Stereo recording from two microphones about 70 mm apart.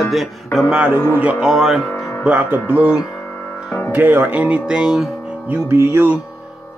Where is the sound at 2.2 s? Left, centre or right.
Right.